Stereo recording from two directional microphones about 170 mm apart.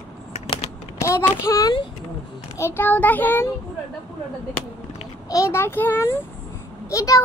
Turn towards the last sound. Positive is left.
turn(degrees=20)  # may be behind; listen again after turning